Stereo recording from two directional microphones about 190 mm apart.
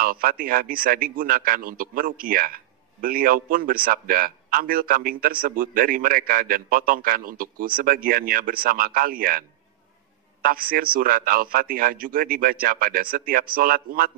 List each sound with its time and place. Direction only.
0.0 s a man's voice: 50° right (ahead or behind)
10.4 s a man's voice: 50° right (ahead or behind)